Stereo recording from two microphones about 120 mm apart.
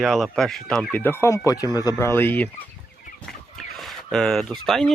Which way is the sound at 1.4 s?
30° left (ahead or behind).